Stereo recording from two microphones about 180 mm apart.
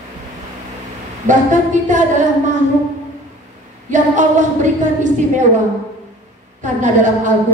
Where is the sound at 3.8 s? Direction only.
45° right (ahead or behind).